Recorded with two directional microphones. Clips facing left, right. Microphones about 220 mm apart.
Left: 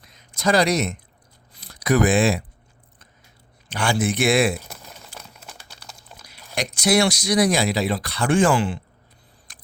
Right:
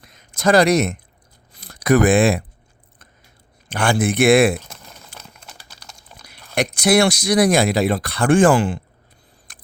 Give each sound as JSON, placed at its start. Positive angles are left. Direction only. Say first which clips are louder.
{"t": 0.0, "sound": "a sound", "louder": "right 4 dB", "side_deg": -50}
{"t": 1.6, "sound": "speech", "louder": "right 4 dB", "side_deg": -50}
{"t": 3.7, "sound": "speech", "louder": "right 3 dB", "side_deg": -55}
{"t": 5.4, "sound": "crumpling", "louder": "left 1 dB", "side_deg": 0}
{"t": 6.2, "sound": "speech", "louder": "right 6 dB", "side_deg": -55}
{"t": 9.5, "sound": "single-lens reflex camera", "louder": "right 2 dB", "side_deg": -50}